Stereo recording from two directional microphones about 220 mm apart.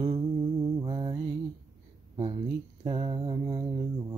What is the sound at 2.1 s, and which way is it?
Mantra, 20° right (ahead or behind).